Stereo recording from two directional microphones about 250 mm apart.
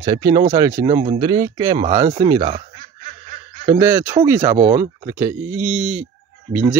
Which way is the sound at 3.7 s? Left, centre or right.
Centre.